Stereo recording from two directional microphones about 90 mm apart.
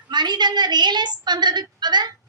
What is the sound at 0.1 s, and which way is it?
A woman's voice, 55° right (ahead or behind).